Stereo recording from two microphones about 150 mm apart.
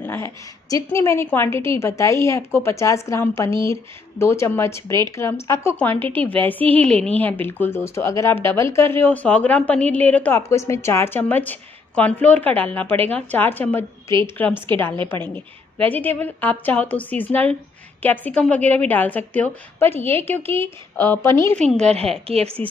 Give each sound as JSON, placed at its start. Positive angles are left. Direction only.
{"t": 0.0, "sound": "a woman's voice", "side_deg": 15}
{"t": 21.5, "sound": "a woman's voice", "side_deg": 5}
{"t": 21.8, "sound": "a woman's voice", "side_deg": -45}
{"t": 22.6, "sound": "speech", "side_deg": 10}